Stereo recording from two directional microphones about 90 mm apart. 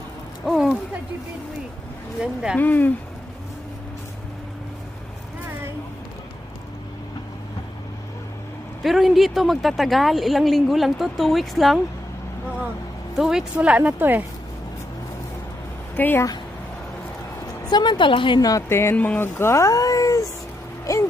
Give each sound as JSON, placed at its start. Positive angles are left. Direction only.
{"t": 0.4, "sound": "a sound", "side_deg": 0}
{"t": 2.2, "sound": "speech", "side_deg": -10}
{"t": 2.6, "sound": "speech", "side_deg": 20}
{"t": 8.8, "sound": "speech", "side_deg": 0}
{"t": 13.1, "sound": "speech", "side_deg": -5}
{"t": 16.0, "sound": "speech", "side_deg": 20}
{"t": 17.7, "sound": "a woman's voice", "side_deg": 55}
{"t": 18.3, "sound": "speech", "side_deg": 45}
{"t": 18.7, "sound": "speech", "side_deg": 30}
{"t": 20.9, "sound": "hoot", "side_deg": 35}